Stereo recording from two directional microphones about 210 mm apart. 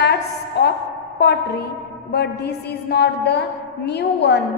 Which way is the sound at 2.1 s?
50° left (ahead or behind).